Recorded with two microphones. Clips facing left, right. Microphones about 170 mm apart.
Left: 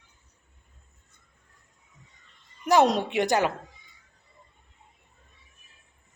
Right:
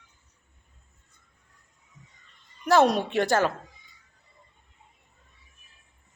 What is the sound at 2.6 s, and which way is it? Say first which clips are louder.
Speech: even; 20° left (ahead or behind).